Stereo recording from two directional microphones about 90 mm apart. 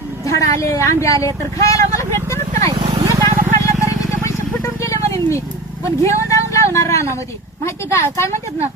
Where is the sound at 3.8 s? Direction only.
35° left (ahead or behind).